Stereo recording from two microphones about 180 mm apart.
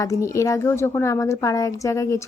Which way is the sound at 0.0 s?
15° left (ahead or behind).